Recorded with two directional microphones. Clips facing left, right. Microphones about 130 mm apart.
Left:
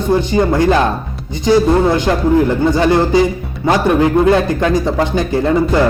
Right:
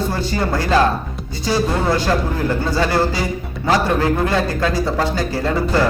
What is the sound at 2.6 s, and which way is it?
Speech, 20° left (ahead or behind).